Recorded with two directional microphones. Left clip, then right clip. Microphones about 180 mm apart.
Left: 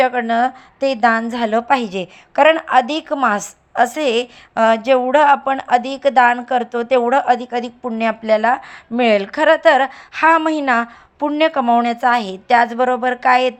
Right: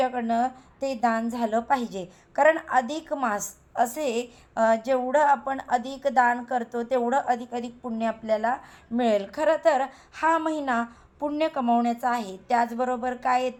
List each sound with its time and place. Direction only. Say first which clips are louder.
0.0 s a woman's voice: left 9 dB; 25° left (ahead or behind)